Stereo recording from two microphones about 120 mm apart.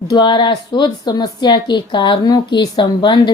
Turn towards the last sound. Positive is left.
turn(degrees=40)  # may be behind; listen again after turning